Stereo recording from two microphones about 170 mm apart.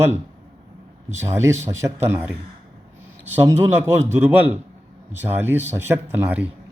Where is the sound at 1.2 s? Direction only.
15° right (ahead or behind).